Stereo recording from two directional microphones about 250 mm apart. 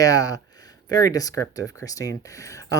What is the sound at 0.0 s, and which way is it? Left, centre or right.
Speech, centre.